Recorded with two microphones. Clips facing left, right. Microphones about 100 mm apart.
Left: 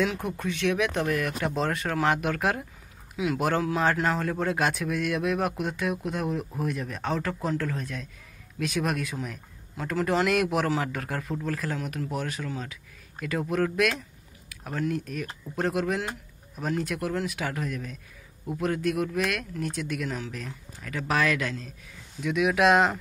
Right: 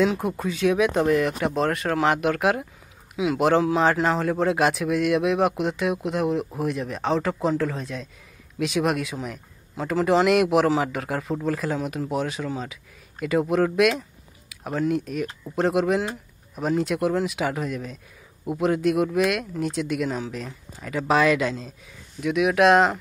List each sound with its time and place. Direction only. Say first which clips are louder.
0.4 s speech: right 4 dB; 10° right (ahead or behind)
0.9 s speech: right 7 dB; 20° right (ahead or behind)
22.2 s speech: right 3 dB; 5° right (ahead or behind)